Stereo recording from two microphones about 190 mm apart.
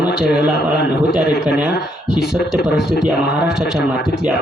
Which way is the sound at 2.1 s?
5° right (ahead or behind).